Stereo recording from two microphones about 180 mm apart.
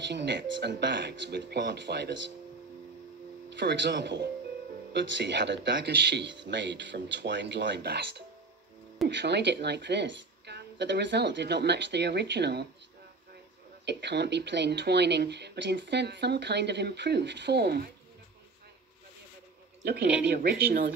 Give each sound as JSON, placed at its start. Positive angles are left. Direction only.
{"t": 0.1, "sound": "speech", "side_deg": -70}
{"t": 3.4, "sound": "speech", "side_deg": -70}
{"t": 9.1, "sound": "speech", "side_deg": -70}
{"t": 13.8, "sound": "speech", "side_deg": -70}
{"t": 19.8, "sound": "speech", "side_deg": -60}